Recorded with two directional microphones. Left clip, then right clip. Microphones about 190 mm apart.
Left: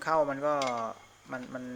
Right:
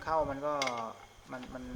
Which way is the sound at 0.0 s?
20° left (ahead or behind).